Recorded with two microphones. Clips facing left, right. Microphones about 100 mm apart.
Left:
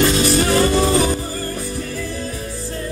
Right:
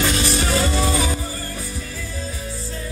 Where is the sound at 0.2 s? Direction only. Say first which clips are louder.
Left 5 dB; 50° left (ahead or behind).